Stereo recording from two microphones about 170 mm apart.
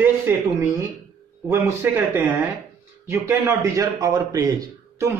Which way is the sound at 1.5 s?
15° right (ahead or behind).